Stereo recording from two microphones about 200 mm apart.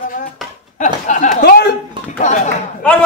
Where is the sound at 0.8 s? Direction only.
40° left (ahead or behind).